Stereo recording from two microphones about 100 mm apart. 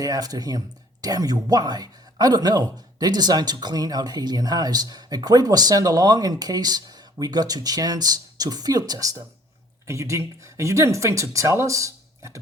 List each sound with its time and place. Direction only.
0.0 s speech: 40° right (ahead or behind)